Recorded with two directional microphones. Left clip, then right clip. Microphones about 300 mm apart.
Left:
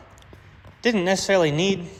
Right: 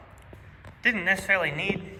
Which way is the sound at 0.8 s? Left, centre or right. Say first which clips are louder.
Left 2 dB; centre.